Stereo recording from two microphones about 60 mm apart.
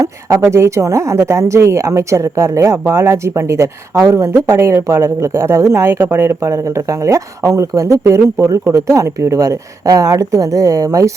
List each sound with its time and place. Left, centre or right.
0.5 s speech: right
6.1 s speech: right
6.7 s a woman's voice: right